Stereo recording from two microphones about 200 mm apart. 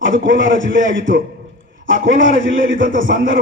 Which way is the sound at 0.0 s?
70° right (ahead or behind).